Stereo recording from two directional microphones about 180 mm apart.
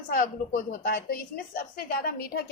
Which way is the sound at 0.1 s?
50° left (ahead or behind).